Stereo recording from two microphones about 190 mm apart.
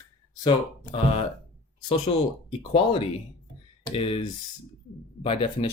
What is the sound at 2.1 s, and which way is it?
Speech, 30° left (ahead or behind).